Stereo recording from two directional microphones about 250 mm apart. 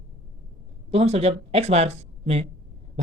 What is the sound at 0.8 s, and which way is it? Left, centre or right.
Speech, right.